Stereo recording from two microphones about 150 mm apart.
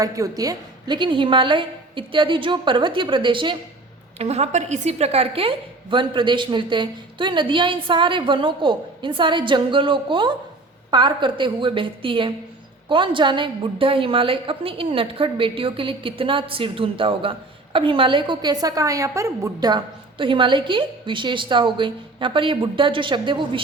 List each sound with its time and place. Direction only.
0.0 s a woman's voice: 25° right (ahead or behind)
4.2 s a woman's voice: 45° right (ahead or behind)